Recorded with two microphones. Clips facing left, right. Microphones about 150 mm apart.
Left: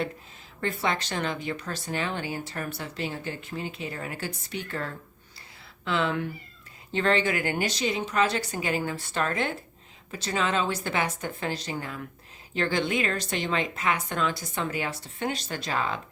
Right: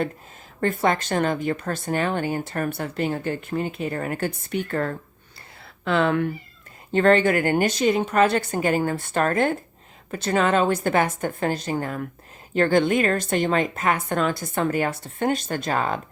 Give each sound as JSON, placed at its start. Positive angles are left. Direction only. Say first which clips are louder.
{"t": 0.6, "sound": "speech", "louder": "right 7 dB", "side_deg": -50}